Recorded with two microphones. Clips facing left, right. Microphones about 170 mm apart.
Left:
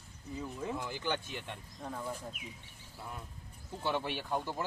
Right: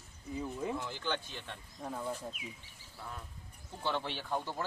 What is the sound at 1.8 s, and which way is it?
Speech, 10° right (ahead or behind).